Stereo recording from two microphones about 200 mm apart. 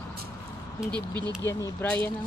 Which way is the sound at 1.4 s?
15° left (ahead or behind).